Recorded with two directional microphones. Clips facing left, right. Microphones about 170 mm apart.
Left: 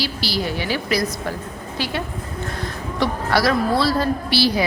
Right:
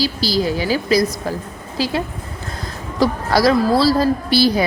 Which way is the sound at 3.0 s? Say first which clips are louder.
Right 4 dB; 40° right (ahead or behind).